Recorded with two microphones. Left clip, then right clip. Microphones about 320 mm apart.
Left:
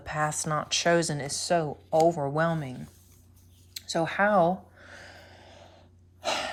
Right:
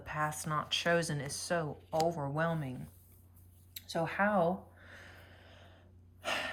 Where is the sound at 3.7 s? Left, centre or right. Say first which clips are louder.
Left 7 dB; centre.